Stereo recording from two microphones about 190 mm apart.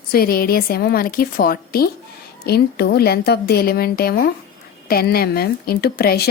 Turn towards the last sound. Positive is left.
turn(degrees=55)  # may be behind; listen again after turning